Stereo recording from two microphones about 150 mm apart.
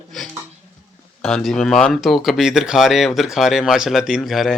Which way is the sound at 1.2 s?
5° left (ahead or behind).